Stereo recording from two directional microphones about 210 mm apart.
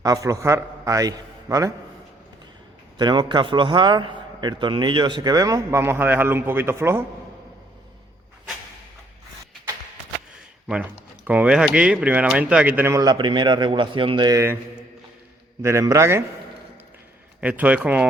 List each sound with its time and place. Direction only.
0.0 s a man's voice: 15° right (ahead or behind)
3.0 s a man's voice: 20° right (ahead or behind)
11.3 s speech: 5° right (ahead or behind)
15.6 s speech: 15° right (ahead or behind)
17.4 s speech: 5° right (ahead or behind)